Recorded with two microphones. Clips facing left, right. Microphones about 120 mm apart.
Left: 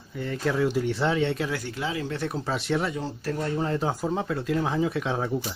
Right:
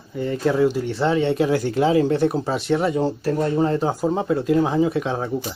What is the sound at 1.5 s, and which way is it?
Speech, 35° right (ahead or behind).